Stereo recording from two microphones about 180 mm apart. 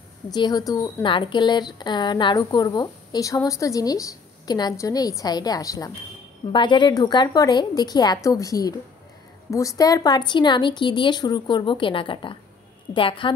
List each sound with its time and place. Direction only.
0.3 s a woman's voice: 20° left (ahead or behind)